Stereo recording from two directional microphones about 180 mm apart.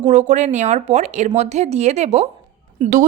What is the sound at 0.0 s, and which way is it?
Speech, 40° right (ahead or behind).